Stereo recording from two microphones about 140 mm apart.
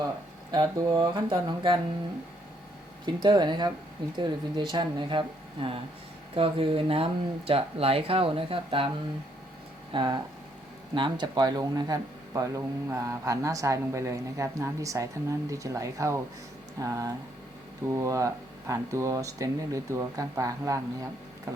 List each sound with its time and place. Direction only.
0.5 s speech: 30° right (ahead or behind)
3.2 s speech: 30° right (ahead or behind)
6.3 s speech: 40° right (ahead or behind)
9.9 s speech: 35° right (ahead or behind)